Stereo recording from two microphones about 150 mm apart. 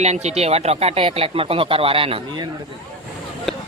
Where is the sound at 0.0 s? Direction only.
50° right (ahead or behind).